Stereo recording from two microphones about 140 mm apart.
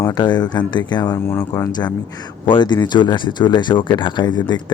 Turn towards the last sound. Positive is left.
turn(degrees=30)  # may be behind; listen again after turning